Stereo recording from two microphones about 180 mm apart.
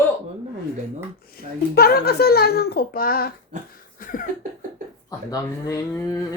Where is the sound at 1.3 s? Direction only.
60° left (ahead or behind).